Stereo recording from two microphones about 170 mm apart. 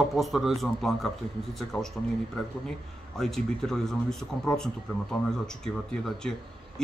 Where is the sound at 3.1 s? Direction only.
Centre (ahead or behind).